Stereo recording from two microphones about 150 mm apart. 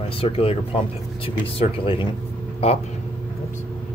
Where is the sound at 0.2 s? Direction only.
40° left (ahead or behind).